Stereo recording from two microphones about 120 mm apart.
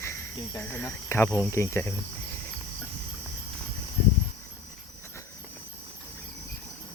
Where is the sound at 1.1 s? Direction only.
25° left (ahead or behind).